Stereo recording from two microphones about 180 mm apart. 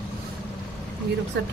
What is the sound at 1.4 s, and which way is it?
Speech, 80° right.